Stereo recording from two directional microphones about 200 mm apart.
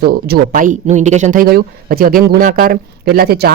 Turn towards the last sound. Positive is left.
turn(degrees=-50)  # may be behind; listen again after turning